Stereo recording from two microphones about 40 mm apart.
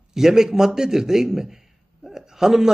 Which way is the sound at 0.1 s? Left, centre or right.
Centre.